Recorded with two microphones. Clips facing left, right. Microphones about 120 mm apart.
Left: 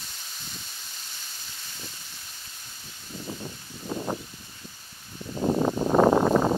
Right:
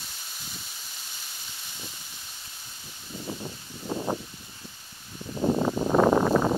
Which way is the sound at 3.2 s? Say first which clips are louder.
Right 1 dB; 15° right (ahead or behind).